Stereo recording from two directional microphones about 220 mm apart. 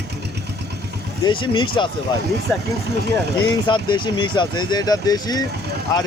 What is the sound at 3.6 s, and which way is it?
Speech, 20° left (ahead or behind).